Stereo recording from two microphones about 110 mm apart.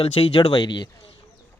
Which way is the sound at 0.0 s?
60° left (ahead or behind).